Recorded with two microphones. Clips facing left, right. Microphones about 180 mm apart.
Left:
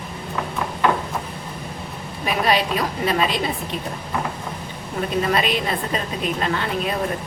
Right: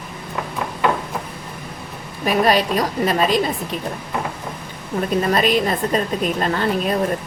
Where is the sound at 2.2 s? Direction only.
45° right (ahead or behind).